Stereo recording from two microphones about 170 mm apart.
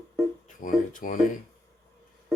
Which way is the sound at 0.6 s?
50° left (ahead or behind).